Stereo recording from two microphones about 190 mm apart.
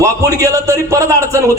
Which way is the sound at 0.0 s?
15° right (ahead or behind).